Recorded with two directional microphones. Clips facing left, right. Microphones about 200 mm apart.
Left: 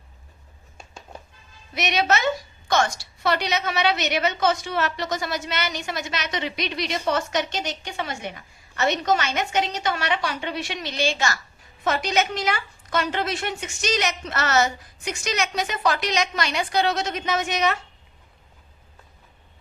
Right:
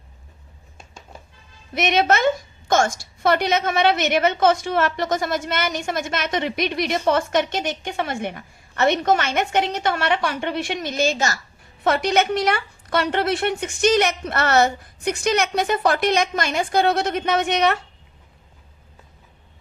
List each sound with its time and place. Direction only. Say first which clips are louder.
1.7 s a woman's voice: right 4 dB; 50° right (ahead or behind)
11.8 s a woman's voice: right 4 dB; 60° right (ahead or behind)